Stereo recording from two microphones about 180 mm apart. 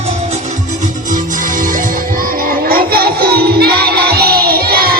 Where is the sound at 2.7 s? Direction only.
55° right (ahead or behind).